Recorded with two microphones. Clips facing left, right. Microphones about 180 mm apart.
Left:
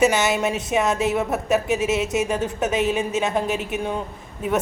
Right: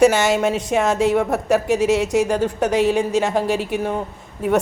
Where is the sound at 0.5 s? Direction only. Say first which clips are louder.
Right 3 dB; 75° right (ahead or behind).